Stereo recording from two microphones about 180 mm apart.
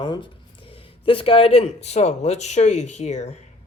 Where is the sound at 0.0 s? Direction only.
25° left (ahead or behind).